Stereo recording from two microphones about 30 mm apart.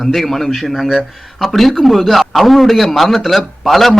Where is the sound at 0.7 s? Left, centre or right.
Centre.